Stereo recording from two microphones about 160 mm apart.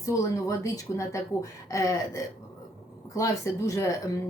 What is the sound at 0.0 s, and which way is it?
Speech, 20° left (ahead or behind).